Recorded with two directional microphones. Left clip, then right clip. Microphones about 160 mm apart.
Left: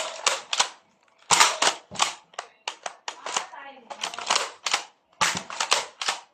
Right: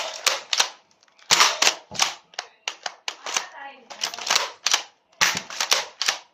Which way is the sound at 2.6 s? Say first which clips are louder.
Right 4 dB; 10° left (ahead or behind).